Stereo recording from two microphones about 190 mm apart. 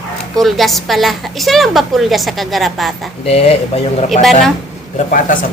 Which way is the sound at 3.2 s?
30° left (ahead or behind).